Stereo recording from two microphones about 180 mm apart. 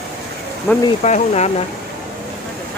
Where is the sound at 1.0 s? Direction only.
40° left (ahead or behind).